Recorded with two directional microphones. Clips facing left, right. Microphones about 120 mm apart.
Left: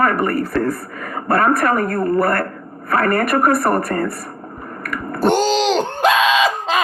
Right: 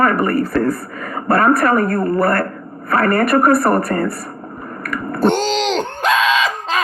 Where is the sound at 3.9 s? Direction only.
25° right (ahead or behind).